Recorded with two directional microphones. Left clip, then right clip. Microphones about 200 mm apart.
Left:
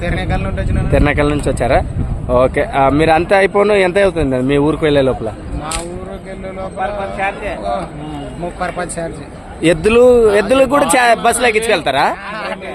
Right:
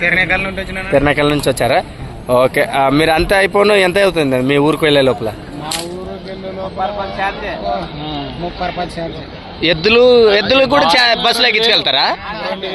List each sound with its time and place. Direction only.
0.1 s speech: centre (ahead or behind)
7.2 s speech: 40° right (ahead or behind)
8.6 s speech: centre (ahead or behind)
9.6 s a man's voice: 20° left (ahead or behind)